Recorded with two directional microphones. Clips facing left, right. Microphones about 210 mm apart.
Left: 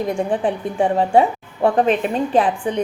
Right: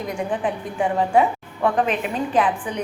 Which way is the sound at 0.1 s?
30° left (ahead or behind).